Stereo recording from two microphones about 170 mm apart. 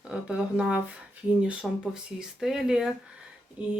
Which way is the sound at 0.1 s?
5° right (ahead or behind).